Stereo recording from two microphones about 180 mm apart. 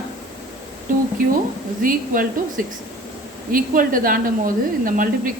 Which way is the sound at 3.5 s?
50° right (ahead or behind).